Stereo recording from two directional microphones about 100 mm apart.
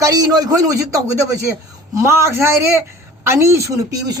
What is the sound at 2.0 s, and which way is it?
Speech, 25° right (ahead or behind).